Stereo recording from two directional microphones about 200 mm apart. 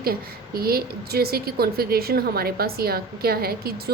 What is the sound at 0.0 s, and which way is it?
A woman's voice, 50° right (ahead or behind).